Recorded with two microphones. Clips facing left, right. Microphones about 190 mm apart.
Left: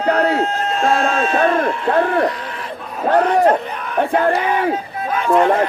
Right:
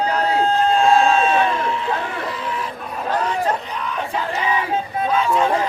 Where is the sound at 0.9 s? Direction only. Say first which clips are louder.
Left 1 dB; 60° left (ahead or behind).